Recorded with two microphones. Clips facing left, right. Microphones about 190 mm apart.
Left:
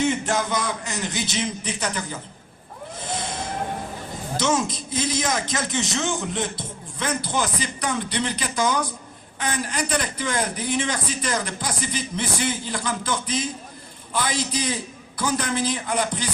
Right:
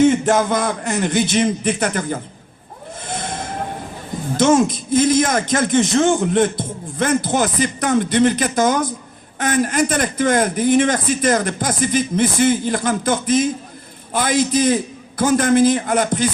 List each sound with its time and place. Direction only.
0.0 s speech: 50° right (ahead or behind)
3.1 s vehicle: 50° right (ahead or behind)
4.4 s speech: 50° right (ahead or behind)